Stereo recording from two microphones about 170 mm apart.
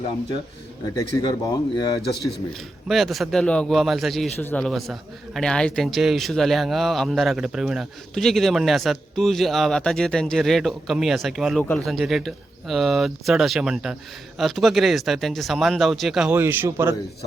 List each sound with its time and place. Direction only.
0.9 s speech: 25° left (ahead or behind)
2.5 s a man's voice: centre (ahead or behind)